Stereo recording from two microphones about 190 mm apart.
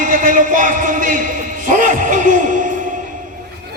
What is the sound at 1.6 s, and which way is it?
Music, 45° right (ahead or behind).